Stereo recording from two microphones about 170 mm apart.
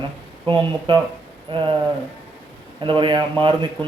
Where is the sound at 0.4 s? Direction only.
30° right (ahead or behind).